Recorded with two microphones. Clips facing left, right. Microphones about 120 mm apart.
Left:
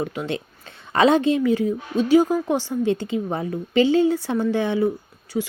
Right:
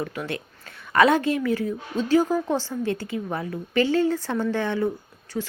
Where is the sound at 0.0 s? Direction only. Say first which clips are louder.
Left 4 dB; 20° left (ahead or behind).